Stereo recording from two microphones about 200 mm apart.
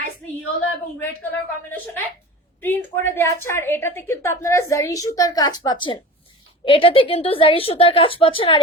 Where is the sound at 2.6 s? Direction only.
10° left (ahead or behind).